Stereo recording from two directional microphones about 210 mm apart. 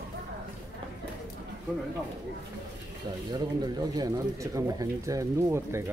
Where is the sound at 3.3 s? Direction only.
20° right (ahead or behind).